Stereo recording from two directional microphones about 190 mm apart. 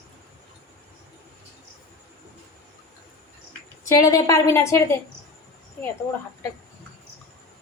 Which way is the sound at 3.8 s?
20° left (ahead or behind).